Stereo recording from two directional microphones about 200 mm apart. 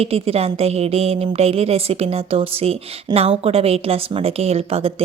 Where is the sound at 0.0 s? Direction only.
30° right (ahead or behind).